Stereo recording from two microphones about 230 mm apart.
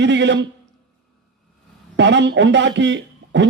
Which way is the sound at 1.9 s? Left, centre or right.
Right.